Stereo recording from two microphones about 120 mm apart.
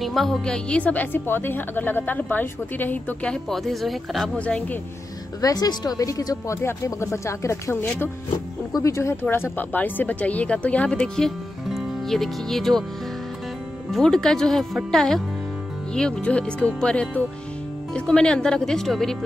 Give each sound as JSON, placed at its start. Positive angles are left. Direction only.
{"t": 0.0, "sound": "a woman's voice", "side_deg": 0}
{"t": 4.4, "sound": "a woman's voice", "side_deg": 10}
{"t": 5.4, "sound": "a woman's voice", "side_deg": 30}
{"t": 13.9, "sound": "a woman's voice", "side_deg": 5}